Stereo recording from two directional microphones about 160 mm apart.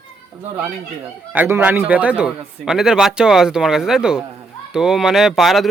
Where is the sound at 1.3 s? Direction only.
10° right (ahead or behind).